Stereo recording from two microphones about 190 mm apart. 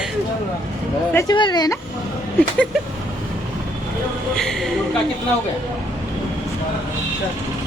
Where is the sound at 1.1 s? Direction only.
20° left (ahead or behind).